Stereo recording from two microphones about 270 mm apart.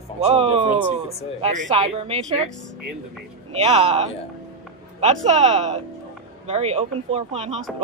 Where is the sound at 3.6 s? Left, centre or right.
Right.